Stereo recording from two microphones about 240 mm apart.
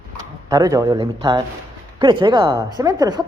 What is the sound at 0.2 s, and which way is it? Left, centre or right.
A woman's voice, centre.